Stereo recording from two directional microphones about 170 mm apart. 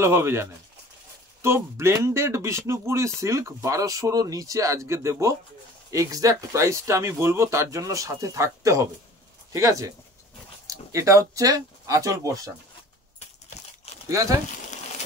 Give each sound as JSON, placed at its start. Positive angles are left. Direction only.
{"t": 0.0, "sound": "speech", "side_deg": -15}
{"t": 14.0, "sound": "speech", "side_deg": -20}